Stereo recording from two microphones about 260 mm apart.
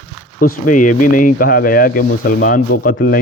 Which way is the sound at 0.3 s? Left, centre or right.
Left.